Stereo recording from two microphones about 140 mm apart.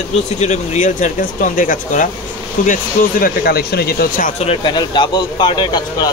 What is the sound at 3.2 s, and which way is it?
Speech, 90° left.